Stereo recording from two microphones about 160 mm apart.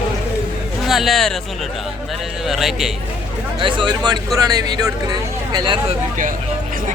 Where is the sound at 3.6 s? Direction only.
30° right (ahead or behind).